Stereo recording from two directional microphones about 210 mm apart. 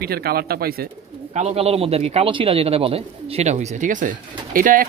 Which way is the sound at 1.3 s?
30° right (ahead or behind).